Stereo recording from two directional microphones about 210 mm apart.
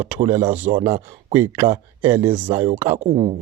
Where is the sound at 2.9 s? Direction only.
30° right (ahead or behind).